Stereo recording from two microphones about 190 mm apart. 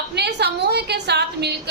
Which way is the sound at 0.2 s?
60° right (ahead or behind).